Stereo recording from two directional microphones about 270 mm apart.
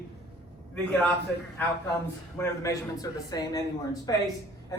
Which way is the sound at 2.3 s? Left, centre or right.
Centre.